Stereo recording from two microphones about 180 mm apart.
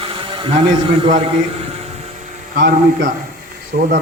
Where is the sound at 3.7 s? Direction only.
55° right (ahead or behind).